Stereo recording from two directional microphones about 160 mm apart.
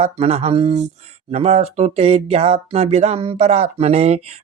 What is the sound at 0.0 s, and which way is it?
Speech, 45° right (ahead or behind).